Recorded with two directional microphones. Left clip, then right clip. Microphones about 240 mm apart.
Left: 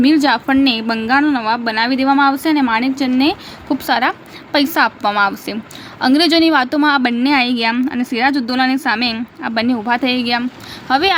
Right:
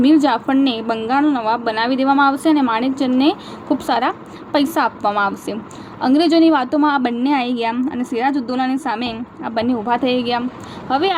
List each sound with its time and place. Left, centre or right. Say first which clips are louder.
0.0 s a woman's voice: left 1 dB; centre